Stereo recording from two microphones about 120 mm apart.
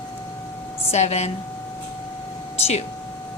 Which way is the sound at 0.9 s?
65° left (ahead or behind).